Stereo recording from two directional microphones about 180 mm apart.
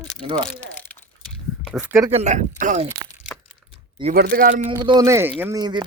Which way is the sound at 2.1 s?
40° right (ahead or behind).